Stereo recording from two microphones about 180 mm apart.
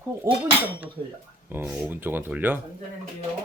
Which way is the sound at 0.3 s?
15° right (ahead or behind).